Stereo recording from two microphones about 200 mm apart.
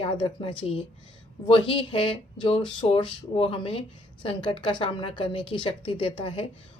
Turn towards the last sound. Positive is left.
turn(degrees=30)  # may be behind; listen again after turning